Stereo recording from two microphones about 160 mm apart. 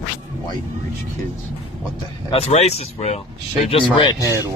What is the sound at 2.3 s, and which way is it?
Speech, 40° left (ahead or behind).